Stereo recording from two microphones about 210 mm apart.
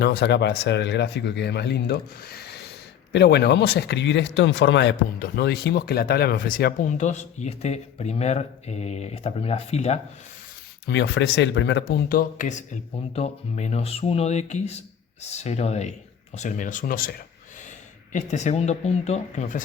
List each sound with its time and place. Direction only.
0.0 s speech: 50° left (ahead or behind); by 10.0 s 30° left (ahead or behind)
10.8 s speech: 55° left (ahead or behind); by 19.6 s 35° left (ahead or behind)